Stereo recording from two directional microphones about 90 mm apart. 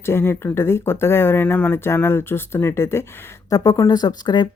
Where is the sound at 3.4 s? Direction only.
40° left (ahead or behind).